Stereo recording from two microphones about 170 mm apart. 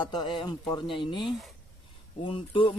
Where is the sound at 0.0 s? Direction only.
25° left (ahead or behind).